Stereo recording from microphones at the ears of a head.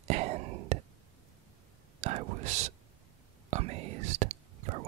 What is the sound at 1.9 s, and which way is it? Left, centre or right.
Whispering, right.